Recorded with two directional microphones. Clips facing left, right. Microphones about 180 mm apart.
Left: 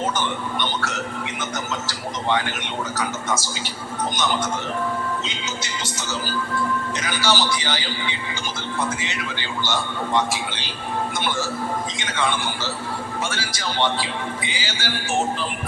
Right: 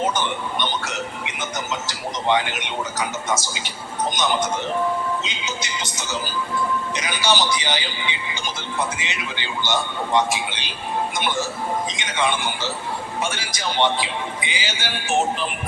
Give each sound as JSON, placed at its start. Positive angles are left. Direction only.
{"t": 0.0, "sound": "speech", "side_deg": -20}
{"t": 11.9, "sound": "speech", "side_deg": -20}